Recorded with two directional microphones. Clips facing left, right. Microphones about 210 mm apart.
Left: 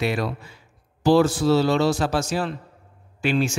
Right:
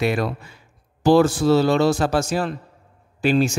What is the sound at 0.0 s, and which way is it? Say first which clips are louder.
Speech: right 3 dB; 50° right (ahead or behind).